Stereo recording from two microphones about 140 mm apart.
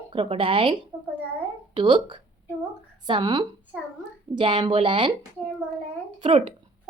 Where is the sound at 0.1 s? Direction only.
40° right (ahead or behind).